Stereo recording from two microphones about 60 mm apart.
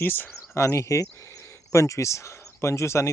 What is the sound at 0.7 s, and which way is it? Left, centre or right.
Speech, left.